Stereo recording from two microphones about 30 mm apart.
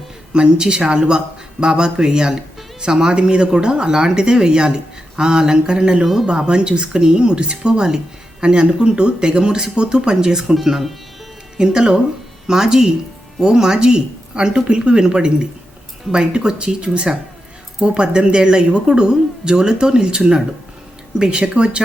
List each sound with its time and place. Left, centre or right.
0.3 s speech: right; by 10.9 s centre
11.5 s speech: right